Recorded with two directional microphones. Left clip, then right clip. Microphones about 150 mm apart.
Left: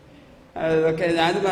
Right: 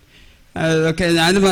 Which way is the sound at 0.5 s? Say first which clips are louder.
Right 3 dB; 20° right (ahead or behind).